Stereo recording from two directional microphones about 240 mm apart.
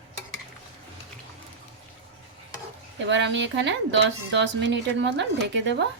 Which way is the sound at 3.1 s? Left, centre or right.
Right.